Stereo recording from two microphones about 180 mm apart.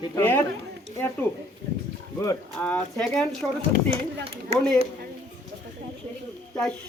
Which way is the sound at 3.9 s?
30° right (ahead or behind).